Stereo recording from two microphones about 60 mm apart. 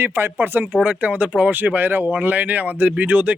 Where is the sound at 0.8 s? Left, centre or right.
Right.